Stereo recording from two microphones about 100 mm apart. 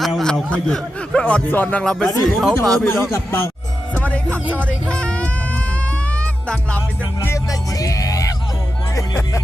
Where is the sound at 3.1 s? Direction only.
25° left (ahead or behind).